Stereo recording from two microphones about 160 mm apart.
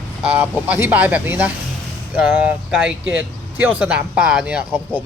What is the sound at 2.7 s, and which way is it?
A man's voice, 5° right (ahead or behind).